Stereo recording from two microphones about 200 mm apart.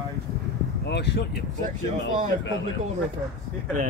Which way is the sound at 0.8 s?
55° left (ahead or behind).